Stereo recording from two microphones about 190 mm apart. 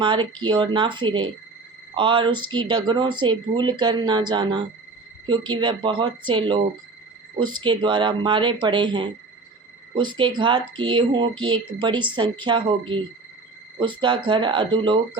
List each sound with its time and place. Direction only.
0.0 s speech: 25° right (ahead or behind)